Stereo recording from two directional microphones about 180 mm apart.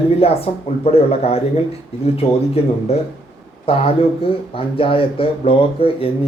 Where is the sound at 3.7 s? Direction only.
30° left (ahead or behind).